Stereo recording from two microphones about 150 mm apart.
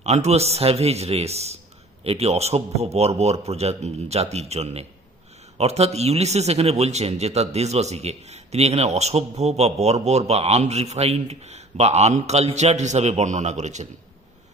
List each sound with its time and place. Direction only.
0.0 s a man's voice: 45° right (ahead or behind)